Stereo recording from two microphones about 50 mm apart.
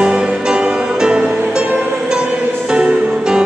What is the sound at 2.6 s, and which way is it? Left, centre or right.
Music, centre.